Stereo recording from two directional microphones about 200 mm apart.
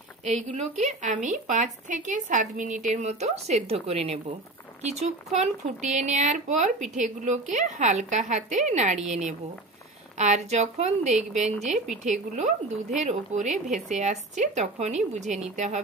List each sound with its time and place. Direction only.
0.2 s speech: 35° right (ahead or behind)